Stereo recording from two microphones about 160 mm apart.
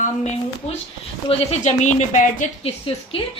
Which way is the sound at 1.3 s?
40° left (ahead or behind).